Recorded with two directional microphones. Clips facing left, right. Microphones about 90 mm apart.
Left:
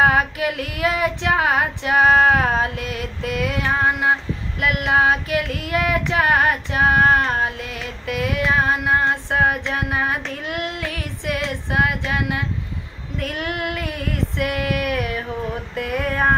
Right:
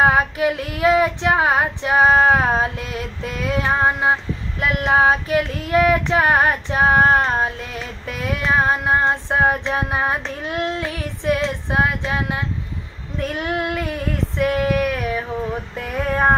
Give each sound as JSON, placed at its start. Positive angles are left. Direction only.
{"t": 0.0, "sound": "child singing", "side_deg": -30}